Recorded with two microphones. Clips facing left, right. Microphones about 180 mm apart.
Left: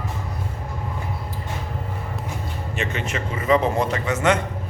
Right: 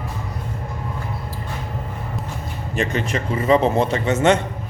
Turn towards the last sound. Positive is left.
turn(degrees=-25)  # may be behind; listen again after turning